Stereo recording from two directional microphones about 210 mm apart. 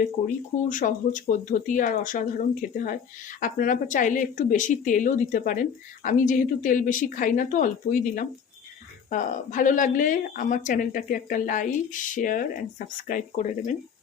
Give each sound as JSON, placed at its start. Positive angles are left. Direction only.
{"t": 0.7, "sound": "speech", "side_deg": 40}